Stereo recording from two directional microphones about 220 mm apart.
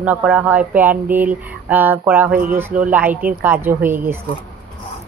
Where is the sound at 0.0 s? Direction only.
10° right (ahead or behind).